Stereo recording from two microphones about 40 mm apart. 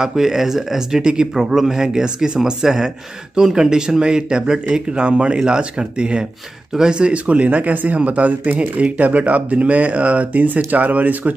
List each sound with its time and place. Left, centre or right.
0.0 s a man's voice: centre; by 11.3 s right